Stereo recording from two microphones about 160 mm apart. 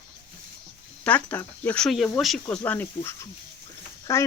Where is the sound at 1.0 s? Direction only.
10° left (ahead or behind).